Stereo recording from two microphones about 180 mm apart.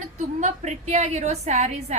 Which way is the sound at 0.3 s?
40° right (ahead or behind).